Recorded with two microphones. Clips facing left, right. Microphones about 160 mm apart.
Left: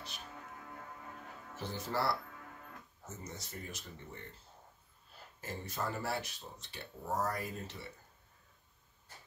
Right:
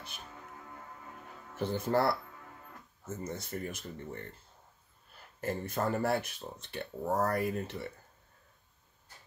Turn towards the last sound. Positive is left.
turn(degrees=-60)  # may be behind; listen again after turning